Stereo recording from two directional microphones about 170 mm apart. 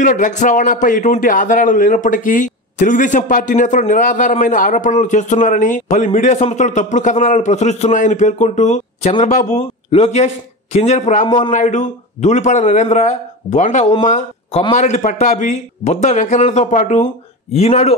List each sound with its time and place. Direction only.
0.0 s a man's voice: 50° left (ahead or behind)